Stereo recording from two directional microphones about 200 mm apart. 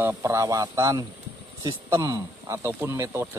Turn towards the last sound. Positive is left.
turn(degrees=-10)  # may be behind; listen again after turning